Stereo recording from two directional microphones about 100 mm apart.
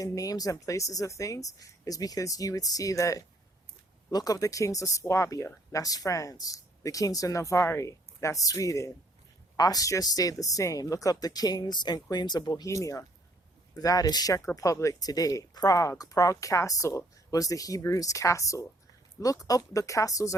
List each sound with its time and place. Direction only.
0.0 s speech: 35° left (ahead or behind)